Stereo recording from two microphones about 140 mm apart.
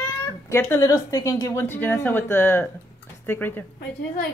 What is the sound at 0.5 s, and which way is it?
Speech, 15° left (ahead or behind).